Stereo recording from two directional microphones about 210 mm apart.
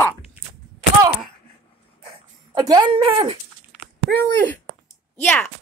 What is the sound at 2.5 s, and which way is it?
Speech, 20° right (ahead or behind).